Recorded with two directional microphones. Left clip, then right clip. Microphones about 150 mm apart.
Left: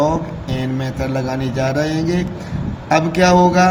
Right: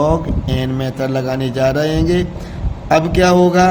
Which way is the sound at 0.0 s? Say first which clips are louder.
Right 2 dB; 55° right (ahead or behind).